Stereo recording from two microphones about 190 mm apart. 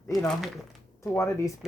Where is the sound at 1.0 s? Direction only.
15° left (ahead or behind).